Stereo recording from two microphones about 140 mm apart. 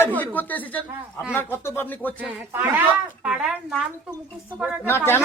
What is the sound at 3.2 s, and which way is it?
Speech, 5° right (ahead or behind).